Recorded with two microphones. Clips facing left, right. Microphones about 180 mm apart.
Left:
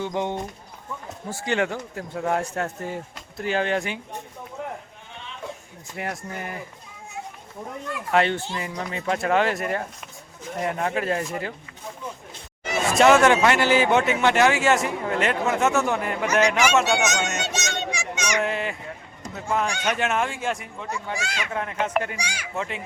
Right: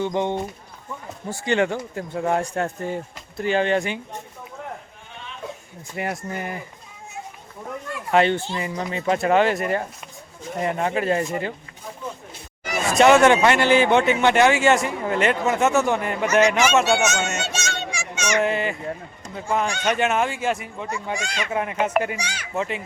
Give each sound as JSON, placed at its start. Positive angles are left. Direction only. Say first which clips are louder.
{"t": 0.0, "sound": "a man's voice", "louder": "right 3 dB", "side_deg": 5}
{"t": 6.0, "sound": "a man's voice", "louder": "right 4 dB", "side_deg": -5}
{"t": 8.1, "sound": "a man's voice", "louder": "right 3 dB", "side_deg": 0}
{"t": 12.8, "sound": "a man's voice", "louder": "right 2 dB", "side_deg": 0}
{"t": 16.8, "sound": "speech", "louder": "right 2 dB", "side_deg": 15}
{"t": 18.4, "sound": "a man's voice", "louder": "right 4 dB", "side_deg": 0}
{"t": 21.1, "sound": "a man's voice", "louder": "right 3 dB", "side_deg": 5}
{"t": 21.5, "sound": "speech", "louder": "right 4 dB", "side_deg": -10}
{"t": 22.2, "sound": "a child's voice", "louder": "right 1 dB", "side_deg": 10}
{"t": 22.5, "sound": "a man's voice", "louder": "right 5 dB", "side_deg": 0}